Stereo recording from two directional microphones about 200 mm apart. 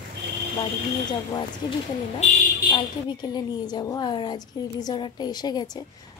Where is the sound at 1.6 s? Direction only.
20° left (ahead or behind).